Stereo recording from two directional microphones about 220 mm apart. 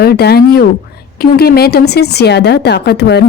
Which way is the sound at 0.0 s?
45° left (ahead or behind).